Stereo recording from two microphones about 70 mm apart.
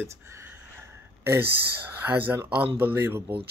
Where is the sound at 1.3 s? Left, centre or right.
Right.